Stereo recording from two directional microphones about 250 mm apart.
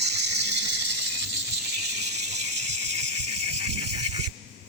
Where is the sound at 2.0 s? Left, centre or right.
Right.